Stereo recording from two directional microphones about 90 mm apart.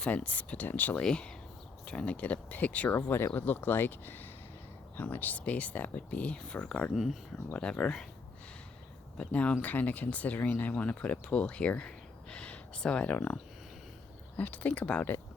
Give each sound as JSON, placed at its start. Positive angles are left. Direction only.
{"t": 0.0, "sound": "speech", "side_deg": 15}
{"t": 6.9, "sound": "speech", "side_deg": 0}
{"t": 7.5, "sound": "speech", "side_deg": 15}
{"t": 9.1, "sound": "speech", "side_deg": 15}